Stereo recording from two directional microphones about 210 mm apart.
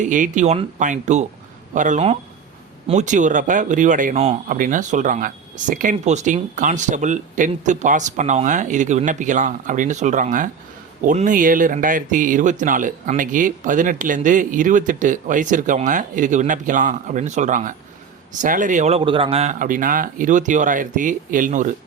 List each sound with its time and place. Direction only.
0.0 s speech: 35° right (ahead or behind)